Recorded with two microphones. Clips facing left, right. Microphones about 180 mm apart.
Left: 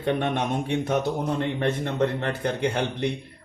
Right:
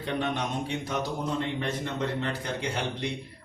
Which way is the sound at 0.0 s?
55° left (ahead or behind).